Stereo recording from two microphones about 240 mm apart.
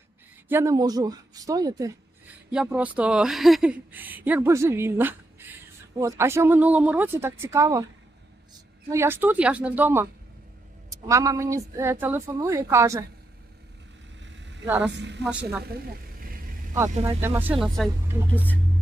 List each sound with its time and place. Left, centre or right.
0.4 s a woman's voice: centre
8.9 s a woman's voice: centre
14.2 s vehicle: right
14.7 s speech: centre
14.9 s speech: right
17.0 s a woman's voice: centre